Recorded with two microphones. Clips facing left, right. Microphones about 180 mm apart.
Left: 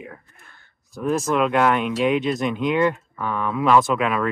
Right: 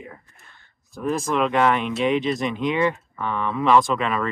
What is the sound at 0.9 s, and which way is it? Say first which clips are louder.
Speech: left 2 dB; centre (ahead or behind).